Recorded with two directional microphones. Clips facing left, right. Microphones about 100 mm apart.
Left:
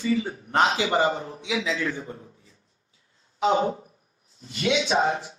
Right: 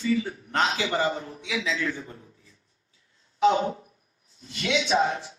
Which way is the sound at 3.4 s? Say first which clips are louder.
Right 1 dB; 30° left (ahead or behind).